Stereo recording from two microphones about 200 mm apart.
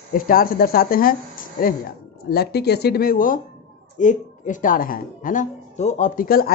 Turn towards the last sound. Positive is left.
turn(degrees=45)  # may be behind; listen again after turning